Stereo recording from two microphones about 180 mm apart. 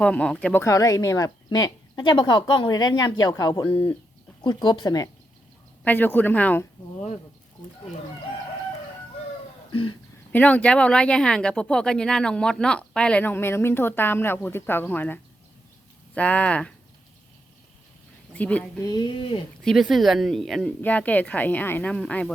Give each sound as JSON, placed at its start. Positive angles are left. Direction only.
{"t": 0.0, "sound": "speech", "side_deg": 5}
{"t": 5.8, "sound": "speech", "side_deg": 10}
{"t": 10.3, "sound": "speech", "side_deg": 5}
{"t": 18.3, "sound": "speech", "side_deg": 5}
{"t": 18.8, "sound": "speech", "side_deg": 20}
{"t": 19.6, "sound": "speech", "side_deg": 0}